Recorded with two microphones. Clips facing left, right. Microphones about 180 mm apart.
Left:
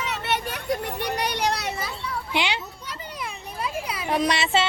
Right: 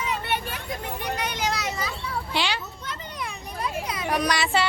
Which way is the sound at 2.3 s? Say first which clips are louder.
Left 2 dB; 20° left (ahead or behind).